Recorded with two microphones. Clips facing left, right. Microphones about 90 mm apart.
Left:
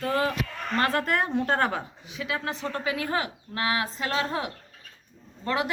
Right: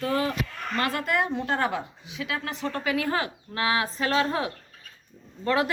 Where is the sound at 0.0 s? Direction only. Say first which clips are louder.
Even; 35° left (ahead or behind); by 2.1 s 50° left (ahead or behind).